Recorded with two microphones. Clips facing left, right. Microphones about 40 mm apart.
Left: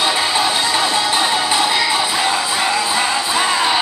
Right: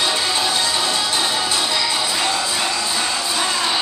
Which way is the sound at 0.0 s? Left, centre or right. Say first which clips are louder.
Left 3 dB; centre.